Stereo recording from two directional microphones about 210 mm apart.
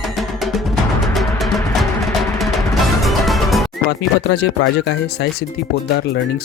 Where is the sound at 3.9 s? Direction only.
50° left (ahead or behind).